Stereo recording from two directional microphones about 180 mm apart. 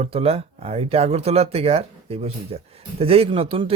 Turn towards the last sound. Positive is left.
turn(degrees=-30)  # may be behind; listen again after turning